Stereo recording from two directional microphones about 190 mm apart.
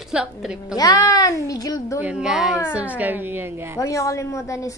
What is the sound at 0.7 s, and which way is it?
A woman's voice, 20° left (ahead or behind).